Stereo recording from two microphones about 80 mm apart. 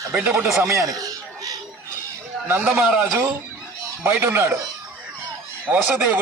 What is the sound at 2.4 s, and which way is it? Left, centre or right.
Speech, right.